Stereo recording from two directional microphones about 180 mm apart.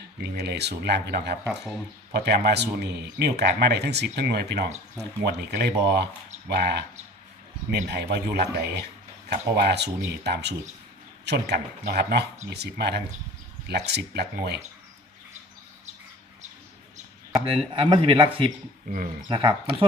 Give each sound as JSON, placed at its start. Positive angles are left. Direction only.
{"t": 0.2, "sound": "speech", "side_deg": -65}
{"t": 17.3, "sound": "speech", "side_deg": -30}
{"t": 18.9, "sound": "speech", "side_deg": -50}
{"t": 19.3, "sound": "speech", "side_deg": -25}